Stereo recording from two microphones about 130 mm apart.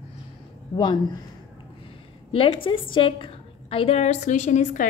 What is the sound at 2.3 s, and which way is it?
A woman's voice, 45° left (ahead or behind).